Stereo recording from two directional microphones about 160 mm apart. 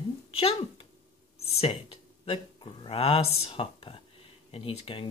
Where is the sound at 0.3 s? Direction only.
35° left (ahead or behind).